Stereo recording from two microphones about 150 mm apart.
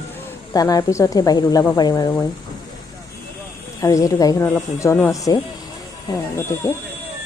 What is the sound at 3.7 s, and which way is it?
A woman's voice, 20° left (ahead or behind).